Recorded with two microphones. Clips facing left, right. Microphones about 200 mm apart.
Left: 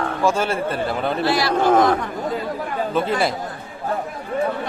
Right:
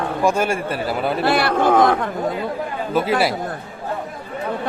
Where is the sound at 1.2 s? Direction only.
55° right (ahead or behind).